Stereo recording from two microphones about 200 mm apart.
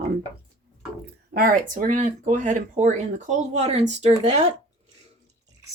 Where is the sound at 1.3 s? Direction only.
45° right (ahead or behind); by 4.5 s 30° right (ahead or behind).